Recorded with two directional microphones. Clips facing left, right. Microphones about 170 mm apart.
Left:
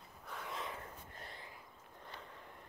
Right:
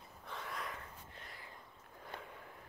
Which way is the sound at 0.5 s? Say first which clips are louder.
Left 1 dB; 25° left (ahead or behind).